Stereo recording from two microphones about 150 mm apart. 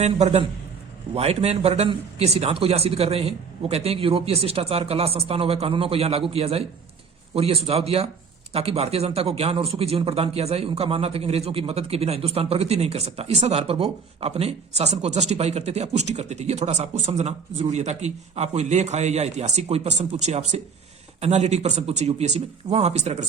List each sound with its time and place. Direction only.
0.0 s a man's voice: 45° right (ahead or behind)